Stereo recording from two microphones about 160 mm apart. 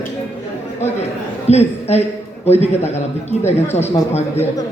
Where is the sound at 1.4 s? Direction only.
45° left (ahead or behind).